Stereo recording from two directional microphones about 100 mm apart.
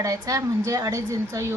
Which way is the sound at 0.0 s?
35° right (ahead or behind).